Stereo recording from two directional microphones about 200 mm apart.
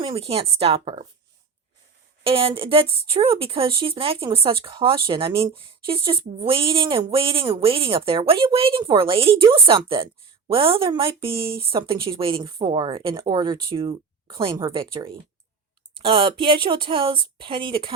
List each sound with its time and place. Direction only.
0.0 s a woman's voice: 30° right (ahead or behind)
2.2 s a woman's voice: 25° right (ahead or behind)